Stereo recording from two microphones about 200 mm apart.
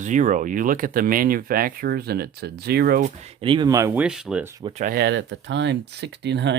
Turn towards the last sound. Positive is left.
turn(degrees=-60)  # may be behind; listen again after turning